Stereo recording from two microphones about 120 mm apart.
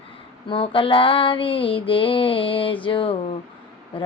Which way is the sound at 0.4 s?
45° left (ahead or behind).